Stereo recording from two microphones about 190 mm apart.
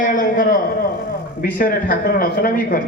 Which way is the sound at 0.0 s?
45° left (ahead or behind).